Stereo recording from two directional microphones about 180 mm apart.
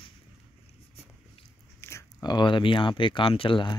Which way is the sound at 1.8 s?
15° left (ahead or behind).